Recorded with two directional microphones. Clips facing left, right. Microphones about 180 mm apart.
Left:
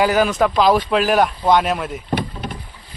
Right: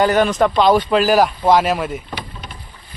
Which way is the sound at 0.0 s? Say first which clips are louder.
Right 1 dB; 5° left (ahead or behind).